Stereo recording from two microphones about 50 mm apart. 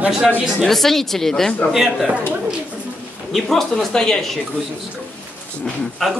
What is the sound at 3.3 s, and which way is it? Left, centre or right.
Speech, centre.